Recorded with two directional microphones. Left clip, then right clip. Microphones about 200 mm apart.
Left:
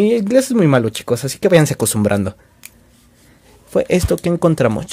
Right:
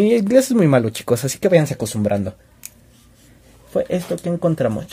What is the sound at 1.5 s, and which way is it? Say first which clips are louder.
Speech: left 4 dB; 25° left (ahead or behind).